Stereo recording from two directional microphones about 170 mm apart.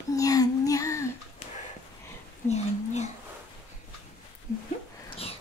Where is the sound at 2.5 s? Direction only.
40° left (ahead or behind).